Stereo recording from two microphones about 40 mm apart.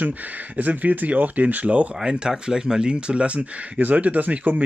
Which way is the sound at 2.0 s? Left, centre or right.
Right.